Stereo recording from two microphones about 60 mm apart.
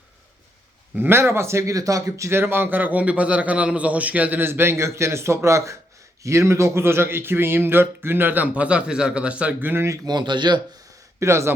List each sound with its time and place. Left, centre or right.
0.9 s a man's voice: right
1.2 s speech: right
1.7 s speech: right
2.3 s a man's voice: right
8.5 s speech: centre
11.2 s speech: right